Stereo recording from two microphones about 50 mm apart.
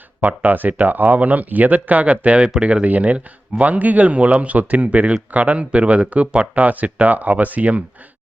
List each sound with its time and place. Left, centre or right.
0.2 s speech: right